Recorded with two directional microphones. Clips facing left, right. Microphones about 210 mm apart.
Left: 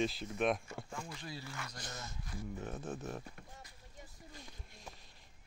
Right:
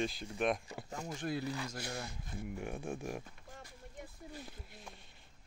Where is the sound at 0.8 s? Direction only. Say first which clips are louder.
Right 11 dB; 40° right (ahead or behind).